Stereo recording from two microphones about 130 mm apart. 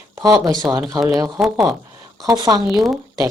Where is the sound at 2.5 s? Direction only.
35° right (ahead or behind).